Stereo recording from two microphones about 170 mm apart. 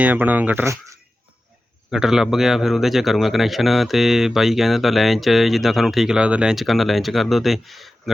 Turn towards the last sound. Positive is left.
turn(degrees=0)  # may be behind; listen again after turning